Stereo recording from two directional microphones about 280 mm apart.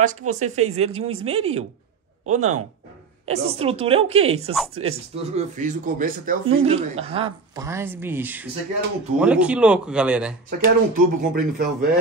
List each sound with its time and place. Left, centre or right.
0.3 s speech: right; by 10.3 s centre
10.6 s speech: right